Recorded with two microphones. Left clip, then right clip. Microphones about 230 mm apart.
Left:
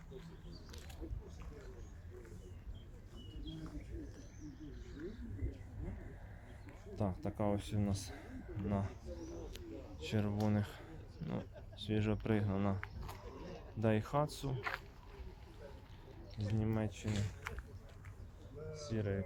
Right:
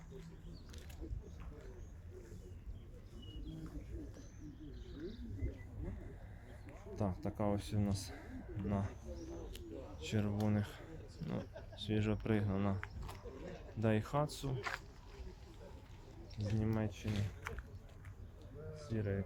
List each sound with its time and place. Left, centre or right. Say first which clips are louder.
0.2 s a sound: left 2 dB; centre
3.4 s bird: left 3 dB; centre
6.9 s speech: even; centre
16.4 s speech: even; centre
18.9 s speech: left 1 dB; centre